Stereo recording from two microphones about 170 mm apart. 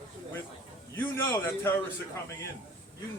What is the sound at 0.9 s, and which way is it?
Speech, 15° left (ahead or behind).